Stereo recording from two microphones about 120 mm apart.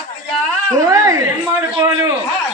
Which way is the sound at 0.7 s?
25° right (ahead or behind).